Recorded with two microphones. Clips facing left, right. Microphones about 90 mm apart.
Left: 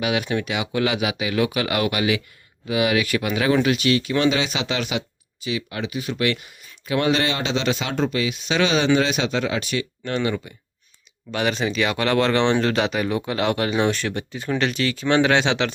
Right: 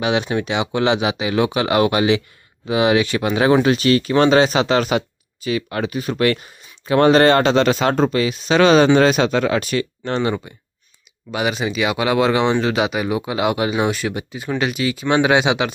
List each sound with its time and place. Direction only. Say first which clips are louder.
0.0 s speech: right 4 dB; 30° right (ahead or behind); by 9.8 s 45° right (ahead or behind)
10.0 s speech: right 3 dB; 30° right (ahead or behind)
11.3 s speech: right 2 dB; 10° right (ahead or behind)